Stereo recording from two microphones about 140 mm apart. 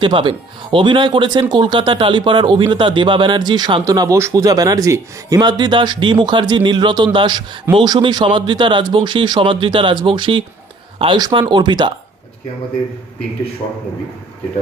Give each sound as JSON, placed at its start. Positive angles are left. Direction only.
{"t": 0.0, "sound": "a man's voice", "side_deg": -35}